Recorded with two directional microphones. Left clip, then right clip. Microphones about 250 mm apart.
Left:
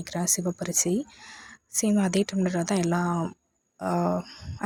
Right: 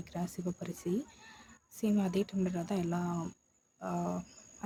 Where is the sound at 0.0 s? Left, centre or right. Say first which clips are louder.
Left 12 dB; left.